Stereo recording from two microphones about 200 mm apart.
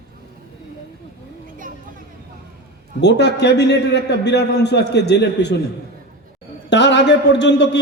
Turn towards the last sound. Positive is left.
turn(degrees=60)  # may be behind; listen again after turning